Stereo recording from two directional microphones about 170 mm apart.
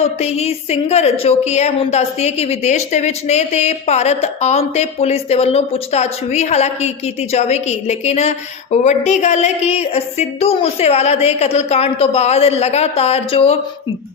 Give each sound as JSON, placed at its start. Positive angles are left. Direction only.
{"t": 0.0, "sound": "a woman's voice", "side_deg": 40}